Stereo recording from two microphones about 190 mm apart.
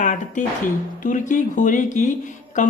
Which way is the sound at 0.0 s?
40° left (ahead or behind).